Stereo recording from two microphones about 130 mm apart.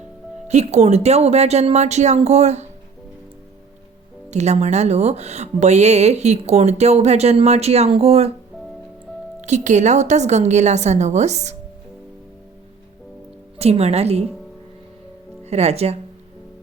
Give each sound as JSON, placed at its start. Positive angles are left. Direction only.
{"t": 0.4, "sound": "speech", "side_deg": -60}
{"t": 4.3, "sound": "speech", "side_deg": -60}
{"t": 9.4, "sound": "speech", "side_deg": -65}
{"t": 13.6, "sound": "a woman's voice", "side_deg": -55}
{"t": 15.4, "sound": "speech", "side_deg": -55}